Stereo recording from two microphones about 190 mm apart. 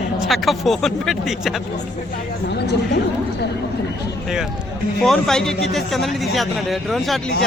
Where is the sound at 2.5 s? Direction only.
60° left (ahead or behind).